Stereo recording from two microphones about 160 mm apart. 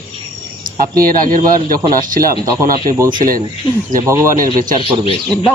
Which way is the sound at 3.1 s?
60° right (ahead or behind).